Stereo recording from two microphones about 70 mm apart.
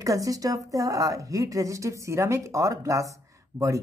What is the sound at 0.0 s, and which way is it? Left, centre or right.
A woman's voice, right.